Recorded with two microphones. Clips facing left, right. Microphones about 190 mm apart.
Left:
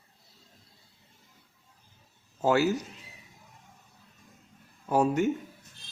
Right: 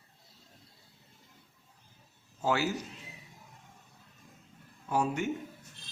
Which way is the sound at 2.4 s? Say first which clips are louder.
Left 6 dB; 45° left (ahead or behind).